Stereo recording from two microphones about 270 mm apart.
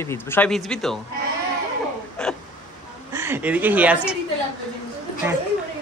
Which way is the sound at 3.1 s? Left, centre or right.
Centre.